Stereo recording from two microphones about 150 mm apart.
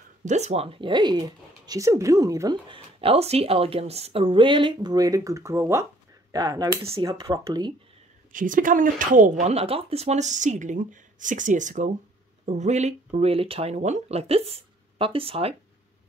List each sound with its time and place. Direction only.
0.2 s speech: 50° right (ahead or behind); by 7.7 s 25° right (ahead or behind)
8.3 s speech: 65° right (ahead or behind)
9.5 s speech: 40° right (ahead or behind)